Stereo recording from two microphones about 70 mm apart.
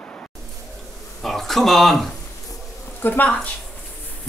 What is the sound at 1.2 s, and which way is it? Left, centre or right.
Speech, centre.